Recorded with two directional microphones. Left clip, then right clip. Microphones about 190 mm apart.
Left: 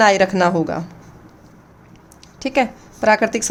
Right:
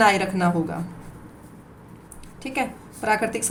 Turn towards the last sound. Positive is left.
turn(degrees=55)  # may be behind; listen again after turning